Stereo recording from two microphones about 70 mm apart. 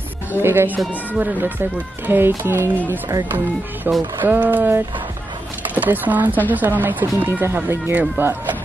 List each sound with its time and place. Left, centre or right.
0.4 s speech: right
3.9 s speech: right